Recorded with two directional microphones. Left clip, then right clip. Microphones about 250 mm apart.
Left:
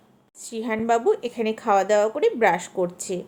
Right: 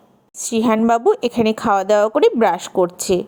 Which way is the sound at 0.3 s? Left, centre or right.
Right.